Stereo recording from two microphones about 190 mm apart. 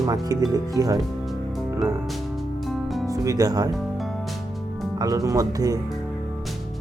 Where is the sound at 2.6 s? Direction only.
Centre (ahead or behind).